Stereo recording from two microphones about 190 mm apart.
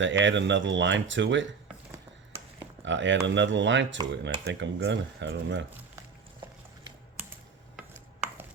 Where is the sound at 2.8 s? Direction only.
75° right (ahead or behind).